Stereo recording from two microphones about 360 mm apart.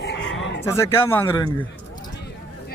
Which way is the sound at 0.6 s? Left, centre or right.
Centre.